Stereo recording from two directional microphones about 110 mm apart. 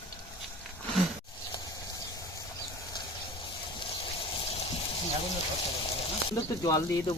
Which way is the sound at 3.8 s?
55° left (ahead or behind).